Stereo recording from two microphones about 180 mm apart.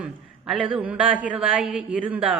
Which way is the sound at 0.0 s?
5° right (ahead or behind).